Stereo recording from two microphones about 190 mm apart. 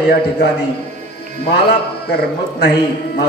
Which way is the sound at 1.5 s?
55° left (ahead or behind).